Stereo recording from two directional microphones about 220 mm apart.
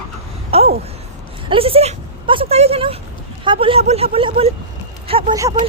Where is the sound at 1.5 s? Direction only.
25° right (ahead or behind).